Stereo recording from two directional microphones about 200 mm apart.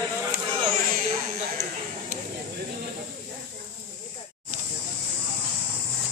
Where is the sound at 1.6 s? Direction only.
40° right (ahead or behind).